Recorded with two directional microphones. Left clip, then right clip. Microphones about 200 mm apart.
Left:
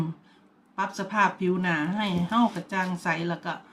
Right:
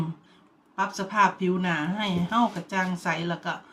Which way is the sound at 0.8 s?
5° left (ahead or behind).